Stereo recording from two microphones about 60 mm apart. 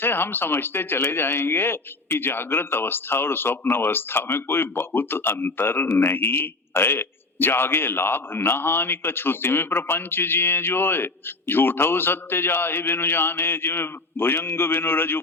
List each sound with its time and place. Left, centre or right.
0.0 s a man's voice: left